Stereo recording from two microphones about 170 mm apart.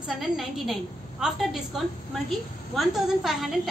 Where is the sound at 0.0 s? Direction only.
Centre (ahead or behind).